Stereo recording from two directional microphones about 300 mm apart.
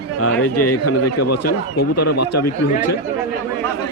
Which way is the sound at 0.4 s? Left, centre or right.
Left.